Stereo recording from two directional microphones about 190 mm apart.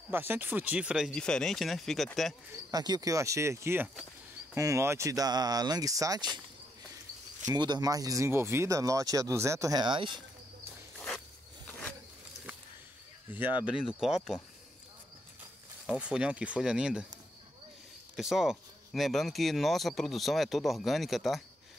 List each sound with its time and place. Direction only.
0.1 s speech: 10° right (ahead or behind)
2.7 s speech: 20° right (ahead or behind)
7.4 s speech: 20° right (ahead or behind)
11.0 s a sound: 5° left (ahead or behind)
13.3 s speech: 10° right (ahead or behind)
15.9 s speech: 5° right (ahead or behind)
18.1 s speech: centre (ahead or behind)